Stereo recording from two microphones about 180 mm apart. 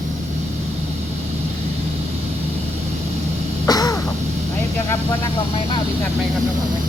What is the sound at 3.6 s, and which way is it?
Caw, 20° left (ahead or behind).